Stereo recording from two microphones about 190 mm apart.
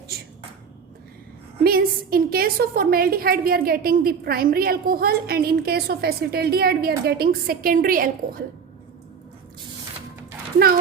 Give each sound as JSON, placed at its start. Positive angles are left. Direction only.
{"t": 1.6, "sound": "a woman's voice", "side_deg": -50}